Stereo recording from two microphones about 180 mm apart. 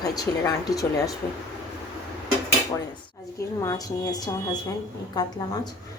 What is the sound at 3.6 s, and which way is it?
Speech, 20° left (ahead or behind).